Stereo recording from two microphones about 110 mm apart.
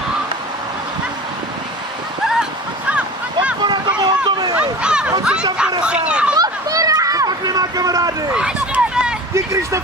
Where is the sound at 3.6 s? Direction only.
45° right (ahead or behind).